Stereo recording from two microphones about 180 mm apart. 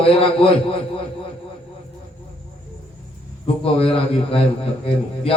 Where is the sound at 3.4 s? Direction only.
30° left (ahead or behind).